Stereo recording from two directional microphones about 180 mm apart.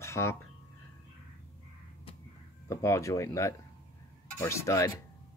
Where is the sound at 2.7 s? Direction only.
15° left (ahead or behind).